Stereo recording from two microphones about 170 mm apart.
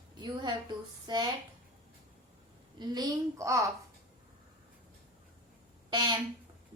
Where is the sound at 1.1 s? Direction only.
25° right (ahead or behind).